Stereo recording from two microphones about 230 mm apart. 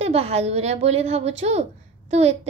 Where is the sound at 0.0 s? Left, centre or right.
Right.